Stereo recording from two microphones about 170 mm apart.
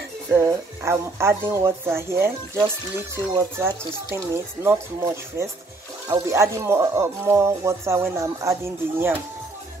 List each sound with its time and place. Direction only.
0.3 s speech: 15° right (ahead or behind)
3.3 s speech: 15° right (ahead or behind)